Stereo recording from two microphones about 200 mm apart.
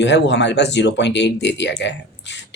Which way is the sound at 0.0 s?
60° left (ahead or behind).